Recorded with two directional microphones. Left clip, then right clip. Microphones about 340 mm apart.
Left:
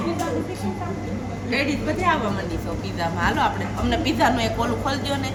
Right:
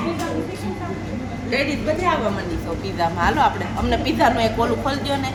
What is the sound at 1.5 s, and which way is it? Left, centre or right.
A woman's voice, centre.